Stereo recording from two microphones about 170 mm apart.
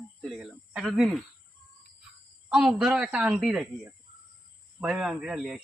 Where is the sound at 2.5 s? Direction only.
5° right (ahead or behind).